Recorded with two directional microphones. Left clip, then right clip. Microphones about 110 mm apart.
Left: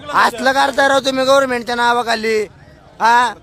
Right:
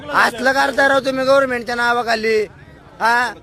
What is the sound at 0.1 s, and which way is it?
A man's voice, 30° left (ahead or behind).